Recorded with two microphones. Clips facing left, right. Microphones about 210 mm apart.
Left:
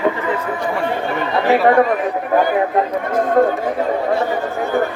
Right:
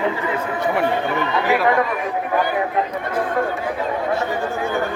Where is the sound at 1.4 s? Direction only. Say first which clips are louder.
Left 6 dB; 35° left (ahead or behind).